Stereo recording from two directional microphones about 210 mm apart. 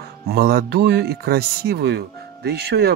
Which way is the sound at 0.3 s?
50° right (ahead or behind).